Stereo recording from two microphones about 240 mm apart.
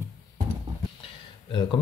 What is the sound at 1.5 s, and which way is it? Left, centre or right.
Speech, centre.